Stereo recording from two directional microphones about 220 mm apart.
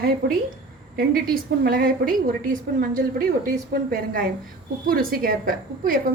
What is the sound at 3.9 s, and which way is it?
A woman's voice, 40° right (ahead or behind).